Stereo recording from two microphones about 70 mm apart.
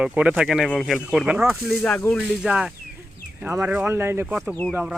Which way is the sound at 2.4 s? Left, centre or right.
Centre.